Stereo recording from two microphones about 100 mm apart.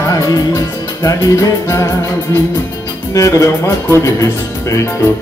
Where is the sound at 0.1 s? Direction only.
35° left (ahead or behind).